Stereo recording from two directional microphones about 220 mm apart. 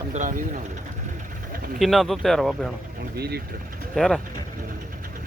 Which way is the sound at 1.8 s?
Centre (ahead or behind).